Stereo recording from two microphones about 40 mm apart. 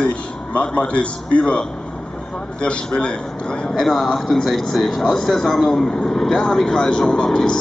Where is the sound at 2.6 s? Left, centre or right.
Left; by 5.9 s centre.